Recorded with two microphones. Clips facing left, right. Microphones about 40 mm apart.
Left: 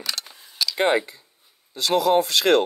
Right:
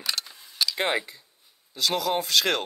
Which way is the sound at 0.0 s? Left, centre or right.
Centre.